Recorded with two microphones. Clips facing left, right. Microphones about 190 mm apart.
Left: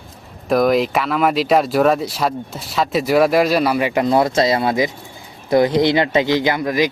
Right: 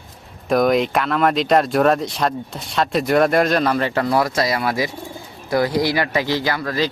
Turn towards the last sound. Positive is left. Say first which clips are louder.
# left 4 dB
turn(degrees=15)  # may be behind; listen again after turning